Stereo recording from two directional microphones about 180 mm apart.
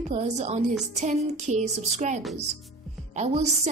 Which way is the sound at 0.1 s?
40° right (ahead or behind).